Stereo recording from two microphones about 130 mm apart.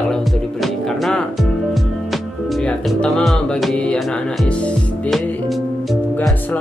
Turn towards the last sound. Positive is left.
turn(degrees=10)  # may be behind; listen again after turning